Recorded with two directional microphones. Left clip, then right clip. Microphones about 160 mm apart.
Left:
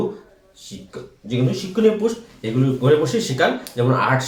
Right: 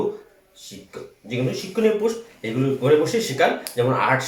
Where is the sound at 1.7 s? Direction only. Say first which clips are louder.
Left 2 dB; 20° left (ahead or behind).